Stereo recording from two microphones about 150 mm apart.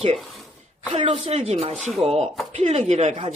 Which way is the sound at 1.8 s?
Centre (ahead or behind).